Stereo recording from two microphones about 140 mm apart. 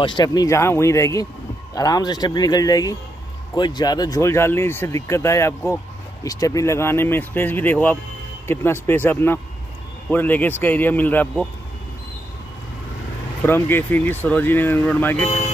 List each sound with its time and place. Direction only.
0.0 s speech: 30° left (ahead or behind); by 11.4 s 10° left (ahead or behind)
13.5 s speech: 15° left (ahead or behind)
15.2 s speech: 50° left (ahead or behind)